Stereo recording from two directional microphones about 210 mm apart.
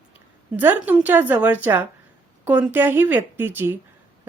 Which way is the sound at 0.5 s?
10° right (ahead or behind).